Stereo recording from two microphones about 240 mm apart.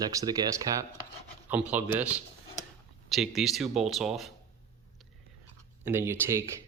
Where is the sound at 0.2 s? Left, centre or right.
Centre.